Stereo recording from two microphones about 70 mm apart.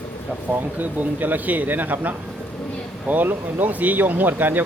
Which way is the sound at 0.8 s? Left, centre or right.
Right.